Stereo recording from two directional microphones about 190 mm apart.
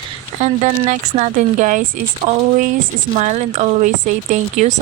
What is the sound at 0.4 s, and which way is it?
Speech, 35° right (ahead or behind).